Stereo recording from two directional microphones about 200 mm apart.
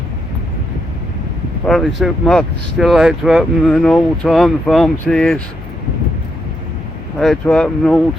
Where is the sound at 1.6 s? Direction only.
Centre (ahead or behind).